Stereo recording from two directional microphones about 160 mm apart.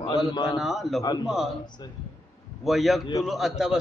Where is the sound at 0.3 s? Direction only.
30° left (ahead or behind).